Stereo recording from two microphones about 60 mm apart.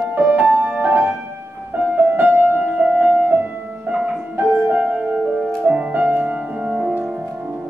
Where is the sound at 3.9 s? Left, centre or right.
Centre.